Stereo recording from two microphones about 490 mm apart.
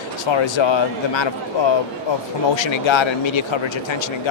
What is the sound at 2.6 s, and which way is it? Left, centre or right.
Speech, left.